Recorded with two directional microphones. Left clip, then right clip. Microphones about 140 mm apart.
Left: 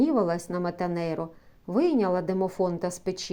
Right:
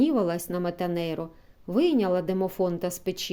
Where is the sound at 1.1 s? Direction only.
25° right (ahead or behind).